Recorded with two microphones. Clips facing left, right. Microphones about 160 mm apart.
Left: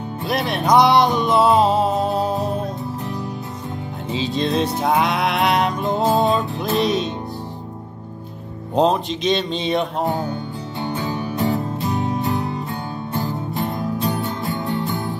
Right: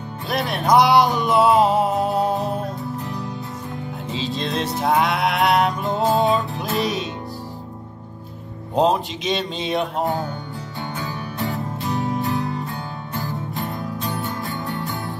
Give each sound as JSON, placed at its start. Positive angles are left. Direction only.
{"t": 0.3, "sound": "music", "side_deg": 0}
{"t": 4.1, "sound": "music", "side_deg": 0}
{"t": 8.7, "sound": "music", "side_deg": -5}
{"t": 10.8, "sound": "music", "side_deg": 20}